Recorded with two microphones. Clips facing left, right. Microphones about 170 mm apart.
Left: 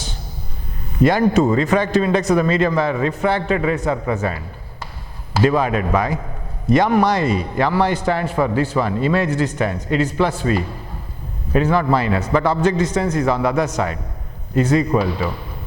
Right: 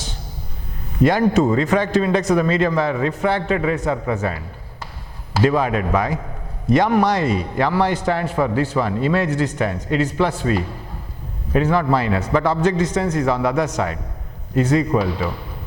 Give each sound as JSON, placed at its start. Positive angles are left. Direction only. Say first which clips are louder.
{"t": 1.0, "sound": "a man's voice", "louder": "left 1 dB", "side_deg": 15}